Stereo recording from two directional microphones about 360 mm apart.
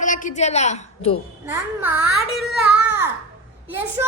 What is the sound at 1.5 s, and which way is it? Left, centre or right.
A child's voice, centre.